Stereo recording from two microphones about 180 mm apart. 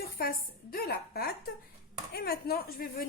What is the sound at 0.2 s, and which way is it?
A woman's voice, 55° left (ahead or behind).